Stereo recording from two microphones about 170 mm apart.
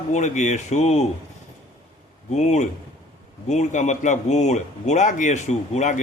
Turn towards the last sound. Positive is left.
turn(degrees=45)  # may be behind; listen again after turning